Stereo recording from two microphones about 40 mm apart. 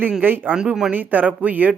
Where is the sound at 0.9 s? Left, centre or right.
Right.